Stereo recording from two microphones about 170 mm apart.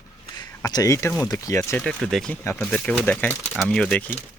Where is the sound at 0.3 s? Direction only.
25° left (ahead or behind).